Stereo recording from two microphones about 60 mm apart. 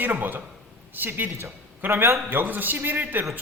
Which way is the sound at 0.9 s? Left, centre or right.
Right.